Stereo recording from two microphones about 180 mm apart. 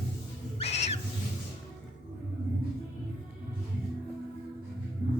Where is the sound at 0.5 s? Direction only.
35° left (ahead or behind).